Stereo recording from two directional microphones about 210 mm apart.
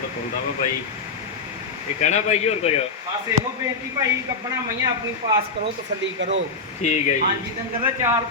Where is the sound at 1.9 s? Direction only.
35° left (ahead or behind).